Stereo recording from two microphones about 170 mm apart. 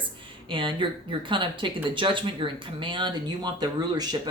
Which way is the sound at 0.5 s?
30° right (ahead or behind).